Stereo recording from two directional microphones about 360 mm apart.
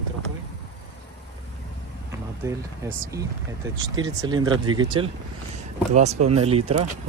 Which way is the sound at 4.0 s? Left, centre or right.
Centre.